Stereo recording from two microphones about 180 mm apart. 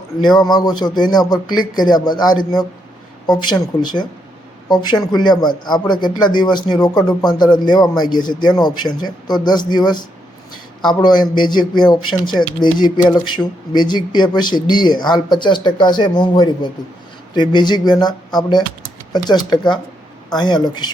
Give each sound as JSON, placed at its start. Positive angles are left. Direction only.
{"t": 0.2, "sound": "speech", "side_deg": 25}